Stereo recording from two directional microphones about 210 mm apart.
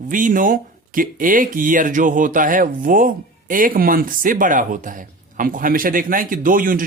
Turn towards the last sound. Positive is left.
turn(degrees=-40)  # may be behind; listen again after turning